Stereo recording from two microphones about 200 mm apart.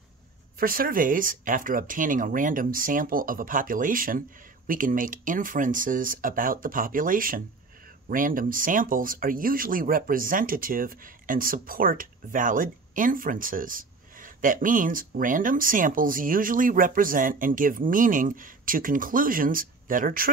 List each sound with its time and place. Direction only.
0.6 s speech: 45° right (ahead or behind)